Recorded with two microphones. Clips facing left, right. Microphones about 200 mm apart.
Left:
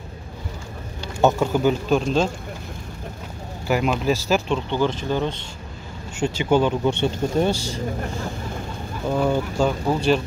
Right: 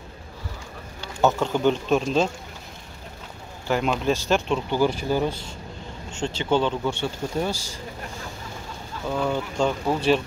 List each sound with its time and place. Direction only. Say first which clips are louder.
1.2 s speech: left 2 dB; 5° left (ahead or behind)
3.6 s speech: left 2 dB; 5° left (ahead or behind)
6.1 s speech: left 4 dB; 10° left (ahead or behind)
7.5 s speech: left 9 dB; 65° left (ahead or behind)
9.0 s speech: left 4 dB; 15° left (ahead or behind)